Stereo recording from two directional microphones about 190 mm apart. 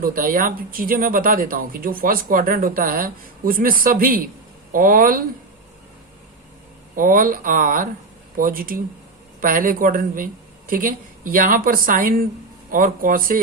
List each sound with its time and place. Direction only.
0.0 s speech: 50° right (ahead or behind)
6.9 s speech: 45° right (ahead or behind)